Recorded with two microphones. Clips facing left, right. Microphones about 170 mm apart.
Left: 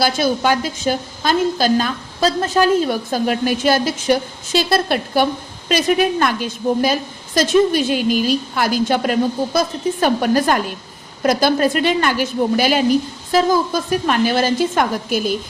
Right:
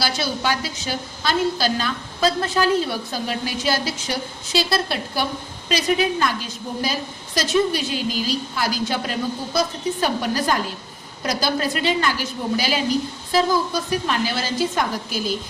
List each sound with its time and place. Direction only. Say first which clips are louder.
0.0 s a woman's voice: left 7 dB; 50° left (ahead or behind)